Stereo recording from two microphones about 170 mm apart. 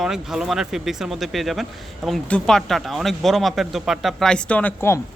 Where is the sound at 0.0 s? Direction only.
Centre (ahead or behind).